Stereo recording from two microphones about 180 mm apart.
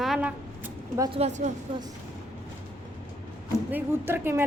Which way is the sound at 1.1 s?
40° right (ahead or behind).